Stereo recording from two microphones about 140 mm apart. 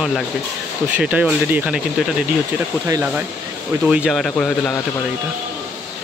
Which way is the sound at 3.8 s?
5° right (ahead or behind).